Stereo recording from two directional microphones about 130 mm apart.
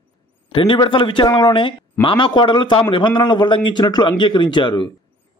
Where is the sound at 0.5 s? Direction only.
40° left (ahead or behind).